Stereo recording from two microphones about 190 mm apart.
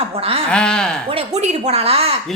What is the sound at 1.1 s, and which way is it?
A woman's voice, 30° right (ahead or behind).